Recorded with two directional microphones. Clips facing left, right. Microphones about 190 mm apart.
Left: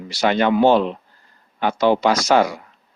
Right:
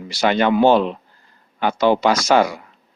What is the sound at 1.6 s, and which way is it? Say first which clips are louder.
Speech: right 1 dB; 40° left (ahead or behind).